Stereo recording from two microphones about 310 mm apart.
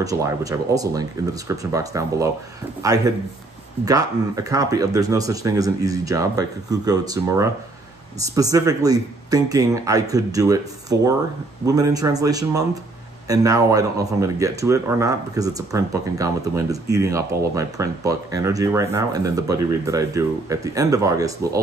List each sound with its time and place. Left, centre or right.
0.0 s speech: centre
3.8 s speech: centre